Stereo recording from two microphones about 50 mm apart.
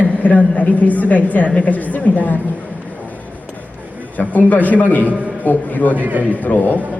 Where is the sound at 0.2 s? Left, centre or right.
Left.